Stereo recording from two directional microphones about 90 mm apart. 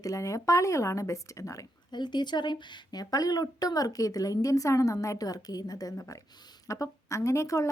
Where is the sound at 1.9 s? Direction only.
55° left (ahead or behind).